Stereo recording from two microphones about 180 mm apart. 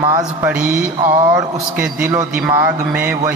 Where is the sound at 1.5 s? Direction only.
15° right (ahead or behind).